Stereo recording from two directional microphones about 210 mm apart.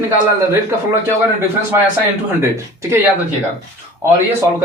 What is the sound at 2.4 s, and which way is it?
Speech, 10° right (ahead or behind).